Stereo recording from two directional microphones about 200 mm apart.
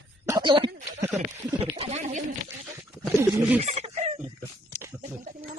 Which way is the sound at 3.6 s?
35° right (ahead or behind).